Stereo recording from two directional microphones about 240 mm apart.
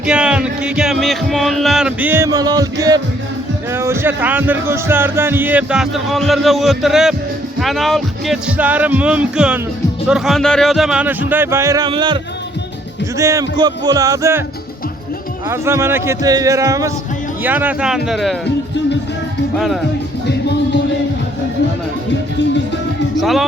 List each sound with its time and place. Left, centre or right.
0.0 s music: centre
3.7 s speech: centre
4.6 s music: centre
10.1 s speech: centre
15.4 s speech: centre
17.4 s music: centre
19.5 s music: centre
22.4 s music: left
23.1 s speech: centre